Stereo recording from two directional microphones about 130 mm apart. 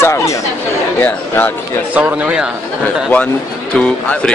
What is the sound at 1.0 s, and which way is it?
Speech, 15° left (ahead or behind).